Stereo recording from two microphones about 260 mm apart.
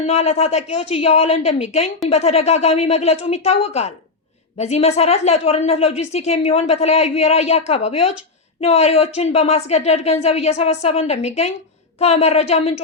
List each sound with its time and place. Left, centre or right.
0.0 s a woman's voice: left